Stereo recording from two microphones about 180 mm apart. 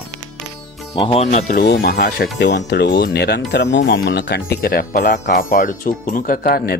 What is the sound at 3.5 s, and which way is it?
Speech, 75° left (ahead or behind).